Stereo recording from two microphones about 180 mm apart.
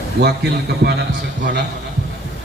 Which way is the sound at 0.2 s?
65° right (ahead or behind).